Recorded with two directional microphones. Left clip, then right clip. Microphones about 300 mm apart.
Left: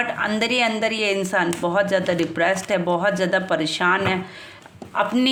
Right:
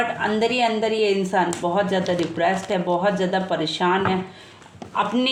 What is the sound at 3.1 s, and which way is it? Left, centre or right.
Speech, left.